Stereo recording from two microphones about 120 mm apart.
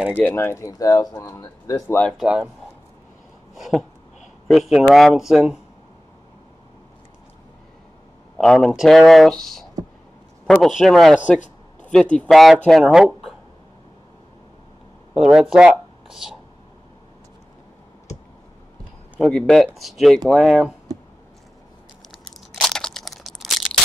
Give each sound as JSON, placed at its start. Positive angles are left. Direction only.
{"t": 0.3, "sound": "speech", "side_deg": 20}
{"t": 2.1, "sound": "speech", "side_deg": -10}
{"t": 3.5, "sound": "a sound", "side_deg": 0}
{"t": 4.5, "sound": "speech", "side_deg": -5}
{"t": 8.4, "sound": "speech", "side_deg": 5}
{"t": 15.1, "sound": "speech", "side_deg": -5}
{"t": 19.2, "sound": "speech", "side_deg": 5}
{"t": 22.6, "sound": "crushing", "side_deg": 5}